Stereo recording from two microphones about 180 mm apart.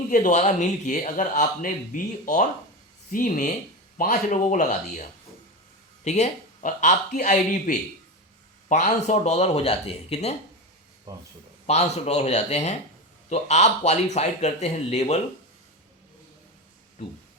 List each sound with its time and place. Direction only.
0.1 s a man's voice: 45° left (ahead or behind)
6.1 s a man's voice: 40° left (ahead or behind)
11.6 s speech: 40° left (ahead or behind)